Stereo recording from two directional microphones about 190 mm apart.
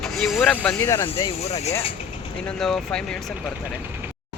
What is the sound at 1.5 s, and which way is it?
Speech, 35° left (ahead or behind).